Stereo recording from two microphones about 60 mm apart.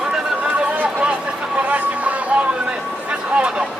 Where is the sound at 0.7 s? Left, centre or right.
Right.